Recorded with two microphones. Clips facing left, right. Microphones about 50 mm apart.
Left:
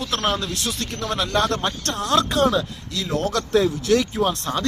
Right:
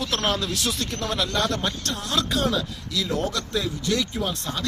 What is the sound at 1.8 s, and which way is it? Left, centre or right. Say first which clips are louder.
Speech: left 6 dB; left.